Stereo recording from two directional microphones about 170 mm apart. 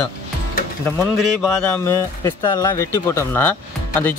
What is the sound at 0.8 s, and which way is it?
Speech, 15° left (ahead or behind).